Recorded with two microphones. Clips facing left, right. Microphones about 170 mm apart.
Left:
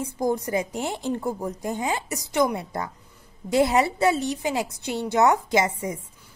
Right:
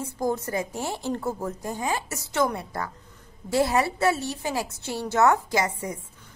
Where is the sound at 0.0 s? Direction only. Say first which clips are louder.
Left 2 dB; 15° left (ahead or behind).